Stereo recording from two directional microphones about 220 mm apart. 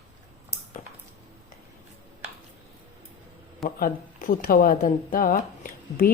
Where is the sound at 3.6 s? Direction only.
40° left (ahead or behind).